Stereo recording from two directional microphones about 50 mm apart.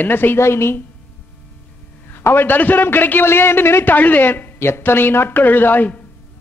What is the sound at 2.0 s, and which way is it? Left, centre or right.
A man's voice, left.